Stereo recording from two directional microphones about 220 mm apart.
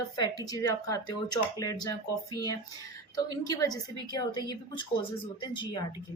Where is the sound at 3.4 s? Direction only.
15° left (ahead or behind).